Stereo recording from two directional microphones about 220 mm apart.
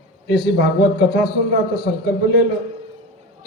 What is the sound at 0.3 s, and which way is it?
A man's voice, 50° left (ahead or behind).